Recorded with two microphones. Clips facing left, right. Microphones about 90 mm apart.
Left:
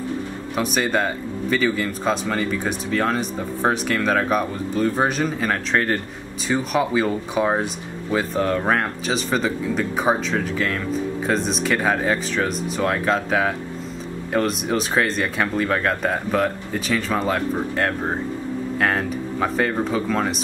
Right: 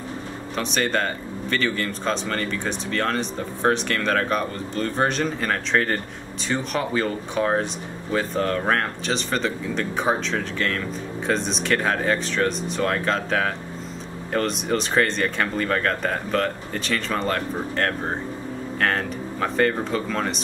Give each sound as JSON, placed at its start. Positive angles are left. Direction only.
{"t": 0.6, "sound": "speech", "side_deg": 5}